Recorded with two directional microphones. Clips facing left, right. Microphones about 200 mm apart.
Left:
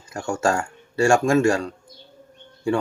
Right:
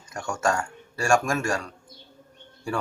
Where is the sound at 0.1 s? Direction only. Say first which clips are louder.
Left 4 dB; 30° left (ahead or behind).